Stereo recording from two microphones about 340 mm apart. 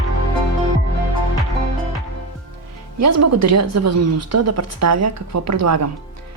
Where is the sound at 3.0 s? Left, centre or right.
Right.